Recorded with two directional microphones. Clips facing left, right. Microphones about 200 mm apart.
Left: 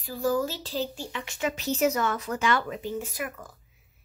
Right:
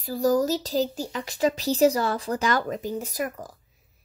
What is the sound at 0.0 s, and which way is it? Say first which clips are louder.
Speech: right 5 dB; 40° right (ahead or behind).